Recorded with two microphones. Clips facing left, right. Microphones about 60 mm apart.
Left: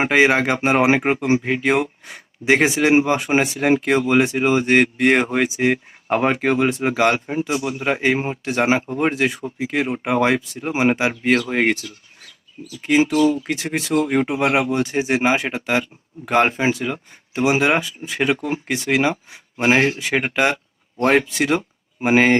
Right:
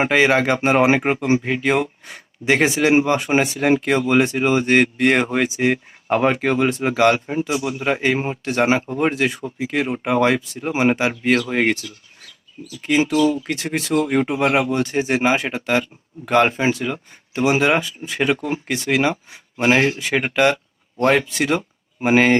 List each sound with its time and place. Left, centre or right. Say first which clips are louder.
0.0 s speech: even; centre